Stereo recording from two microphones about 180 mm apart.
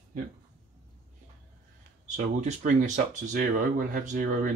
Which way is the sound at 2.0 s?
45° right (ahead or behind).